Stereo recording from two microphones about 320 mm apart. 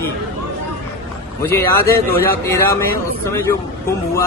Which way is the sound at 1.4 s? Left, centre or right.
Centre.